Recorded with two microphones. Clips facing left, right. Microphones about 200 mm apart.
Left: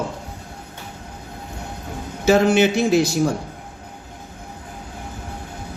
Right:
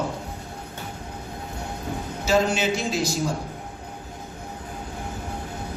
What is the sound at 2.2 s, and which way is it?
Speech, 65° left (ahead or behind).